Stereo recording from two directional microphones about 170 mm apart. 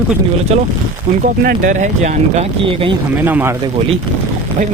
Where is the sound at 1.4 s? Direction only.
50° right (ahead or behind); by 2.9 s 35° right (ahead or behind).